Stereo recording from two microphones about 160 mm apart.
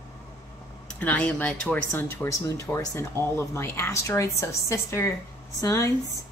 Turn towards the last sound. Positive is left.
turn(degrees=20)  # may be behind; listen again after turning